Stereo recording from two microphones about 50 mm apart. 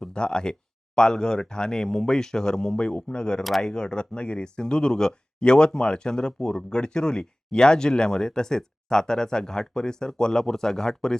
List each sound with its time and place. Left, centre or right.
0.0 s speech: centre